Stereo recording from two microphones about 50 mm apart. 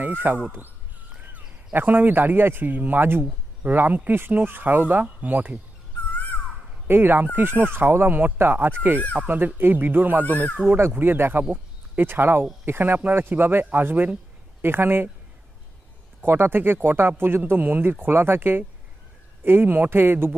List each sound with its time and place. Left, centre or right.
0.0 s speech: right
1.1 s caw: right
1.7 s speech: right
6.1 s a sound: left
6.8 s speech: right
16.2 s speech: right
18.0 s speech: right